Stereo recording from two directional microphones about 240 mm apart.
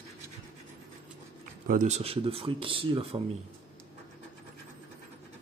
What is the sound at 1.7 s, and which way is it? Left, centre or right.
Speech, right.